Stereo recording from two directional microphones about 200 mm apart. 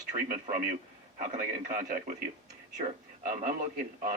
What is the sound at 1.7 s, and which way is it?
Speech, 40° right (ahead or behind).